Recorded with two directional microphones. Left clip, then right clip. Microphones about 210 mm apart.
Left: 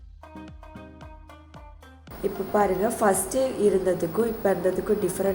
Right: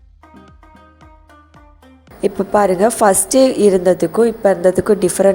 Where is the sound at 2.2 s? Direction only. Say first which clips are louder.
Right 10 dB; 50° right (ahead or behind).